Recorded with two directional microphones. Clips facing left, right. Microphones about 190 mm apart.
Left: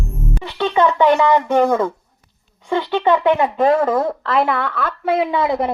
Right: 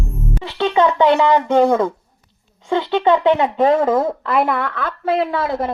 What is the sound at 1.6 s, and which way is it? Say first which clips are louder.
Speech: right 1 dB; 15° right (ahead or behind).